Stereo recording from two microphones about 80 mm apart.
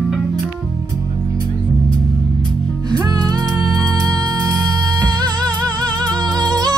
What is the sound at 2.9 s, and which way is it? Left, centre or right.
Music, right.